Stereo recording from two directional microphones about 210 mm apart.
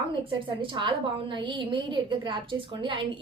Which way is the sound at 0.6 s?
25° right (ahead or behind).